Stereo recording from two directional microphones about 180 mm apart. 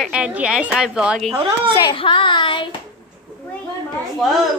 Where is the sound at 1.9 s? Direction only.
25° left (ahead or behind).